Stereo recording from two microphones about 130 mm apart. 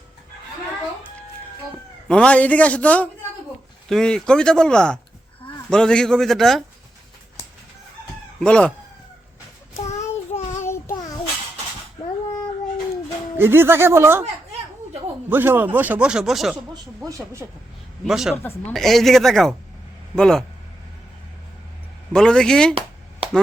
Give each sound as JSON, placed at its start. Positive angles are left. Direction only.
{"t": 2.0, "sound": "a man's voice", "side_deg": 10}
{"t": 8.4, "sound": "a man's voice", "side_deg": 10}
{"t": 9.8, "sound": "child singing", "side_deg": 60}
{"t": 10.6, "sound": "child singing", "side_deg": 20}
{"t": 13.3, "sound": "speech", "side_deg": -15}
{"t": 15.3, "sound": "speech", "side_deg": -15}
{"t": 18.0, "sound": "speech", "side_deg": -5}
{"t": 22.1, "sound": "speech", "side_deg": 5}